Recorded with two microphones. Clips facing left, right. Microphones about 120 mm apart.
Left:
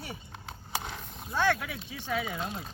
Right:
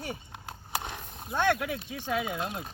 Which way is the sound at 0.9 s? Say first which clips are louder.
Even; 15° right (ahead or behind).